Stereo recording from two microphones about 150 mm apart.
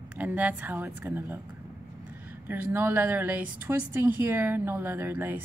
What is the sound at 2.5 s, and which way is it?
Speech, 15° right (ahead or behind).